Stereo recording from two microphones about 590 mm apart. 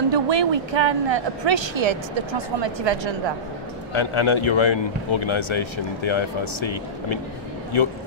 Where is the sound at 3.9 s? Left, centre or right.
Left.